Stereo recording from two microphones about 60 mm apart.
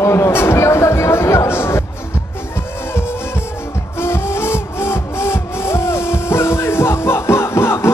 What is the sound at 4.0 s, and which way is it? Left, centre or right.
Music, left.